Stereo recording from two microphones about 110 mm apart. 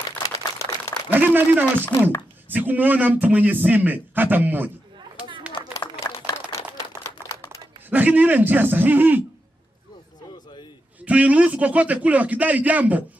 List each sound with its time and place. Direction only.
0.2 s a sound: 35° left (ahead or behind)
1.1 s a man's voice: 15° right (ahead or behind)
1.9 s speech: 40° left (ahead or behind)
2.5 s a man's voice: 15° right (ahead or behind)
6.0 s a sound: 20° left (ahead or behind)
7.9 s a man's voice: 15° right (ahead or behind)
11.1 s a man's voice: 10° right (ahead or behind)